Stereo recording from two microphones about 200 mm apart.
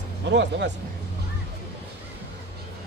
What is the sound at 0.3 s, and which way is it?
Speech, 60° right (ahead or behind).